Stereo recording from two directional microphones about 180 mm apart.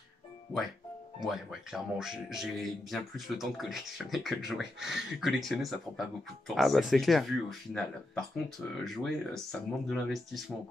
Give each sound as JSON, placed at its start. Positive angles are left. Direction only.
{"t": 1.2, "sound": "speech", "side_deg": 0}